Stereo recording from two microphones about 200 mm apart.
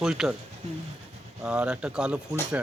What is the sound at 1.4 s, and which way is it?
Speech, 5° right (ahead or behind).